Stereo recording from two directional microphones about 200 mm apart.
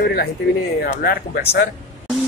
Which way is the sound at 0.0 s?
50° left (ahead or behind).